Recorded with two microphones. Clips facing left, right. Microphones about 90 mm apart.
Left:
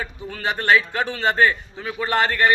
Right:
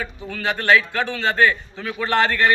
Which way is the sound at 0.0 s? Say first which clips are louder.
Right 1 dB; 20° left (ahead or behind).